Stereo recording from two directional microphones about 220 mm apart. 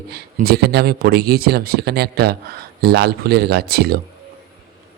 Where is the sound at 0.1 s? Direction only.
45° right (ahead or behind).